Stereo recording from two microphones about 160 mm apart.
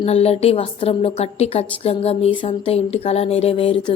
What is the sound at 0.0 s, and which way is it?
A woman's voice, 40° left (ahead or behind).